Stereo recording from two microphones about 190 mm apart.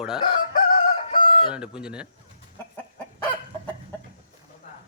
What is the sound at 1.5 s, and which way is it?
Speech, 5° right (ahead or behind).